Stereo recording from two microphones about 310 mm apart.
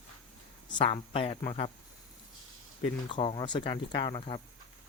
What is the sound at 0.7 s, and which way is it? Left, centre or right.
Speech, centre.